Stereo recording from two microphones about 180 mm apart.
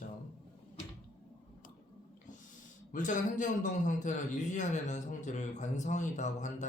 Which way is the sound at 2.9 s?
45° left (ahead or behind).